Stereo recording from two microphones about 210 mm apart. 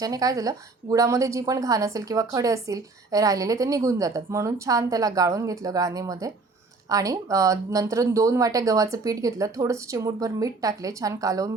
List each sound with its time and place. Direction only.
0.0 s a woman's voice: 15° right (ahead or behind)